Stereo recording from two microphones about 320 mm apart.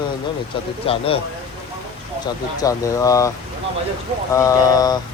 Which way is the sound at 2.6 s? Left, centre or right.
Centre.